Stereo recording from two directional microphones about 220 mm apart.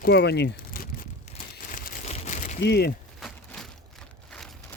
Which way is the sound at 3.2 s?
Centre (ahead or behind).